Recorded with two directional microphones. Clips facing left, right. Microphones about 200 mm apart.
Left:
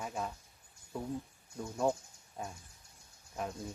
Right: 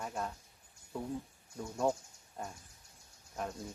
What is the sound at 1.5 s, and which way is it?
Speech, centre (ahead or behind).